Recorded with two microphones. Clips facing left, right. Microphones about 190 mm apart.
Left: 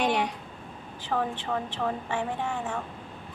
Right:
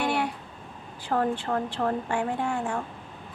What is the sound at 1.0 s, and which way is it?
A woman's voice, 10° right (ahead or behind).